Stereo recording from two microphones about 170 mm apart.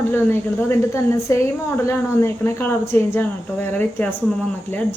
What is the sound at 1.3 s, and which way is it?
Speech, 15° left (ahead or behind).